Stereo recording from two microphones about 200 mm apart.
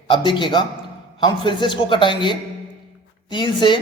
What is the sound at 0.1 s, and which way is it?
A man's voice, 25° left (ahead or behind).